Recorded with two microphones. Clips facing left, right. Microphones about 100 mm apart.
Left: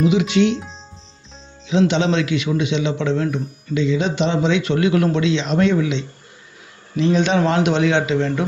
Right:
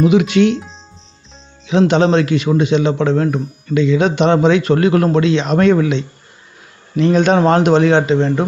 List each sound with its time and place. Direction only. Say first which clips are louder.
0.0 s a man's voice: right 4 dB; 55° right (ahead or behind)
1.8 s a man's voice: right 5 dB; 40° right (ahead or behind)